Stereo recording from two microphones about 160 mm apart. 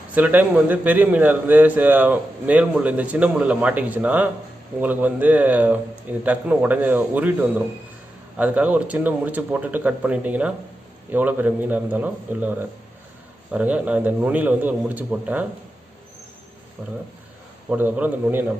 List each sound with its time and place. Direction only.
0.1 s a man's voice: 10° right (ahead or behind)
17.7 s a man's voice: 10° right (ahead or behind)